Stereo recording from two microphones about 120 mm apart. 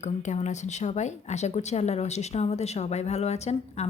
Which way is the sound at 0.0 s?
80° left.